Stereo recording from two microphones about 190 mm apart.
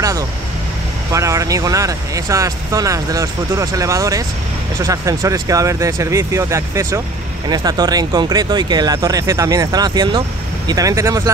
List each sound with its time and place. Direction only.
1.1 s speech: 15° right (ahead or behind)